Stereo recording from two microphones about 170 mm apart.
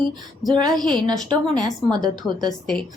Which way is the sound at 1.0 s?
20° right (ahead or behind).